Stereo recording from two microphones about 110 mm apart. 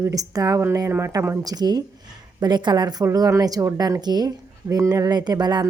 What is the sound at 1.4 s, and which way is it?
A woman's voice, 35° right (ahead or behind).